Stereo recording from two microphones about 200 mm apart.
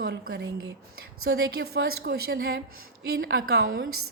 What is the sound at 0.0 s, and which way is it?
Speech, 55° right (ahead or behind).